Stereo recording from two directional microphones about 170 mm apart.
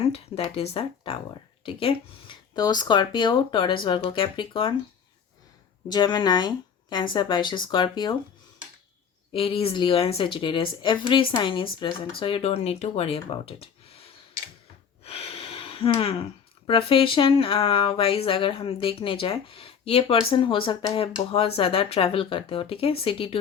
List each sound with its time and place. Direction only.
0.0 s speech: 35° left (ahead or behind)
5.9 s speech: 25° left (ahead or behind)
9.3 s speech: 35° left (ahead or behind)
15.0 s a sound: 35° left (ahead or behind)
16.6 s speech: 30° left (ahead or behind)